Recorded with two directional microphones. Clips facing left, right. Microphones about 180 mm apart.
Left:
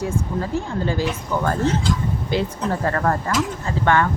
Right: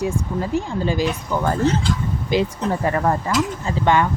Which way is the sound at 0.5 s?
15° right (ahead or behind).